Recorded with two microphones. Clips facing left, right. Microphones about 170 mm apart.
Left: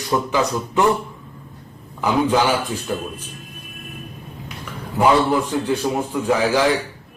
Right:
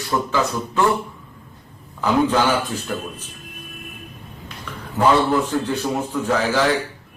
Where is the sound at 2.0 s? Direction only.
10° left (ahead or behind).